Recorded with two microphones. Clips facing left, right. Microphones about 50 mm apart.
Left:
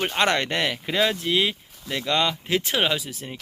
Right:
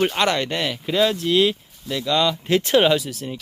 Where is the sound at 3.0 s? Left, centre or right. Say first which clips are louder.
Right 5 dB; centre.